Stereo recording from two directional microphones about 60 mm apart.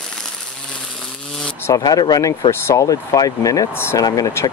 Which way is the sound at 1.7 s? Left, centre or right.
Left.